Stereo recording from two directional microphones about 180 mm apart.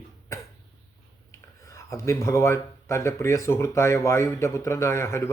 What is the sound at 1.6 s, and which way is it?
A man's voice, 15° left (ahead or behind).